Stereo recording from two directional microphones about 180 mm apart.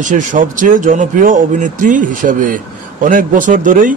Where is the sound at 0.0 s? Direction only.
45° right (ahead or behind).